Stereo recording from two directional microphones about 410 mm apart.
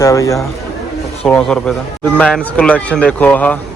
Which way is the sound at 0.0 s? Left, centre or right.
Centre.